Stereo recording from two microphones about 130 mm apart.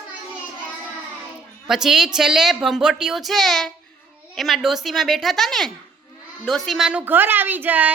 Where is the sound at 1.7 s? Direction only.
5° right (ahead or behind).